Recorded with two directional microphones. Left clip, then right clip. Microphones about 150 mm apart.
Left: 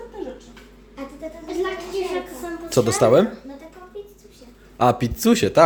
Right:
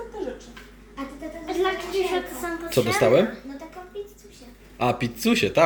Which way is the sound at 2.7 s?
45° left (ahead or behind).